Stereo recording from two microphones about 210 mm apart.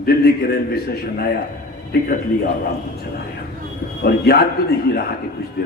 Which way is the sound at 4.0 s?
50° left (ahead or behind).